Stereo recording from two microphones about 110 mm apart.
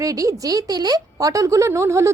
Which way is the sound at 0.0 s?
30° right (ahead or behind).